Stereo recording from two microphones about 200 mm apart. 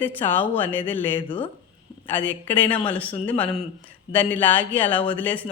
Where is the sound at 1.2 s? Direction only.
25° left (ahead or behind).